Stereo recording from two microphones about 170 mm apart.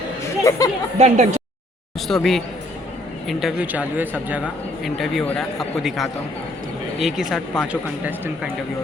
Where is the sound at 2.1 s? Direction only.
Centre (ahead or behind).